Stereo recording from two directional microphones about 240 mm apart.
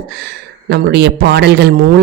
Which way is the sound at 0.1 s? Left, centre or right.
Right.